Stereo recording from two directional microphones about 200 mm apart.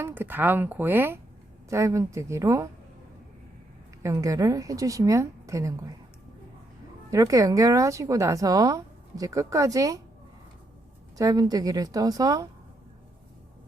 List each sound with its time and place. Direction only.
0.0 s speech: 10° right (ahead or behind)
4.0 s speech: 15° right (ahead or behind)
7.1 s speech: 15° right (ahead or behind)
11.2 s a woman's voice: 20° right (ahead or behind)